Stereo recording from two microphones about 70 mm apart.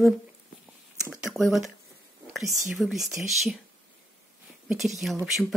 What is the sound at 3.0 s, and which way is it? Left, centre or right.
Speech, right.